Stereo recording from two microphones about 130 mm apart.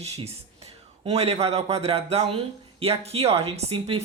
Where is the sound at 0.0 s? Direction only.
50° right (ahead or behind).